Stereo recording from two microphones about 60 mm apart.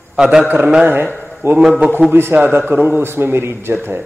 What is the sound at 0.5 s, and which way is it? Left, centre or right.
Speech, right.